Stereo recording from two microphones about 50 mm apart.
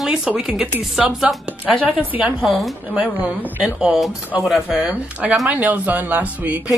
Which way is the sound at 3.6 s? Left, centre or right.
Centre.